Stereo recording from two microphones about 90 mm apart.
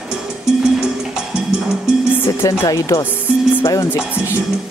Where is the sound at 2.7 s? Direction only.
40° left (ahead or behind).